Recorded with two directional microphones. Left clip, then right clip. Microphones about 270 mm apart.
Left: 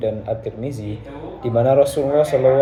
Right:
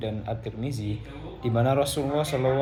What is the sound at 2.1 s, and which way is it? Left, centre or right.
Speech, centre.